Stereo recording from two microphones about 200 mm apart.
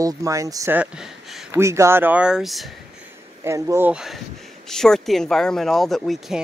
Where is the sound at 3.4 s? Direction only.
15° right (ahead or behind).